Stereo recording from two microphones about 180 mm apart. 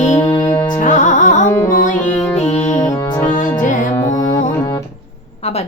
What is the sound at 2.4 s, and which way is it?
Music, 40° left (ahead or behind).